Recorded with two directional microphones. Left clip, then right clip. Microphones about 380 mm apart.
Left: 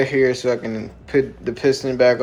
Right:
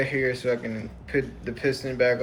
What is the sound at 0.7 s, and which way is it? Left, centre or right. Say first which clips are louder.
Speech: left 7 dB; left.